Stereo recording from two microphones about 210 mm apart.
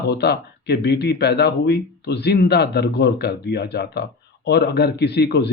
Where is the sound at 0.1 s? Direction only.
50° left (ahead or behind).